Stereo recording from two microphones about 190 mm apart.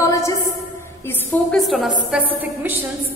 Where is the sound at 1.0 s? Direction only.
Centre (ahead or behind).